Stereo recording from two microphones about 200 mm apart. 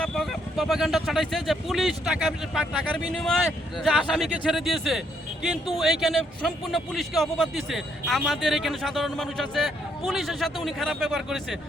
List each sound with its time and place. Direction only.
0.0 s speech: centre (ahead or behind)